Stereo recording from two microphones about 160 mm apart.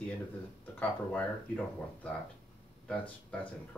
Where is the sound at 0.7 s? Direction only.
10° left (ahead or behind).